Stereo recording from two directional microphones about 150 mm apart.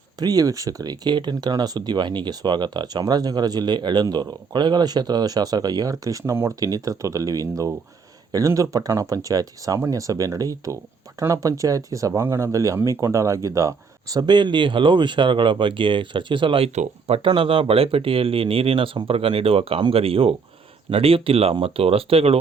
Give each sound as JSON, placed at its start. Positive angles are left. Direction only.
{"t": 0.2, "sound": "speech", "side_deg": -25}